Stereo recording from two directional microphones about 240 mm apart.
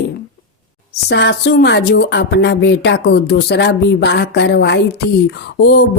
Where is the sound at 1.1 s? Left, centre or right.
Left.